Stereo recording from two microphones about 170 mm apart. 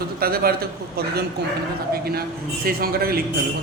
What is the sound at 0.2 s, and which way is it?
A man's voice, 65° right (ahead or behind).